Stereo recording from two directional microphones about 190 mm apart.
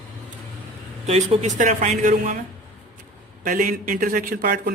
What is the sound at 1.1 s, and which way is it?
Speech, 35° right (ahead or behind).